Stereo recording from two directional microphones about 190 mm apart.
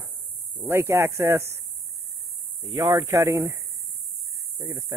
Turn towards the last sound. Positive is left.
turn(degrees=-15)  # may be behind; listen again after turning